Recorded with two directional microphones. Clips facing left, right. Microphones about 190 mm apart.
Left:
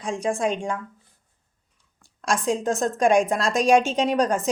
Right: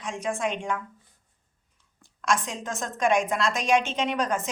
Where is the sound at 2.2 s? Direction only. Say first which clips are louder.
Left 4 dB; 40° left (ahead or behind).